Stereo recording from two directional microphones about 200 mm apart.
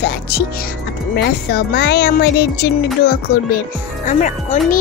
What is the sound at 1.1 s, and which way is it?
Speech, 55° left (ahead or behind).